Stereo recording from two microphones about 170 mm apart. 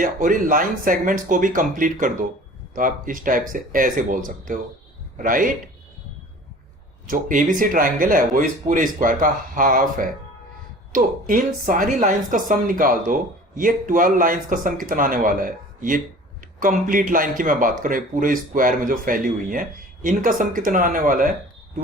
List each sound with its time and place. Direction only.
0.0 s speech: 55° right (ahead or behind)
7.1 s speech: 50° right (ahead or behind)